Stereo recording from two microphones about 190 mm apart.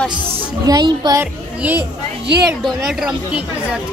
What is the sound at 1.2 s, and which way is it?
A woman's voice, 10° right (ahead or behind).